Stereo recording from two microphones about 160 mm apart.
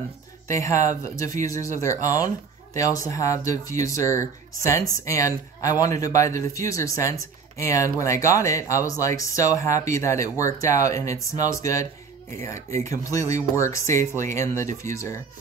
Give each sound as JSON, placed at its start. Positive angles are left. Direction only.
{"t": 0.5, "sound": "speech", "side_deg": 20}